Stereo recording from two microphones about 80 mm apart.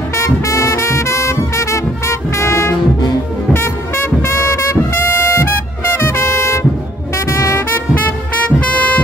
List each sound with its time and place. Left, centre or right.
0.2 s music: left
5.9 s music: left
8.5 s heart sounds: centre